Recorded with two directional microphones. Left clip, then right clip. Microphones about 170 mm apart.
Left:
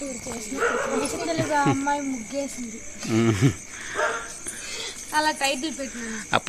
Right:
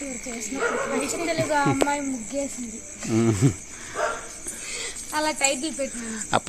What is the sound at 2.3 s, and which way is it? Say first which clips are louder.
Speech: right 1 dB; 10° right (ahead or behind).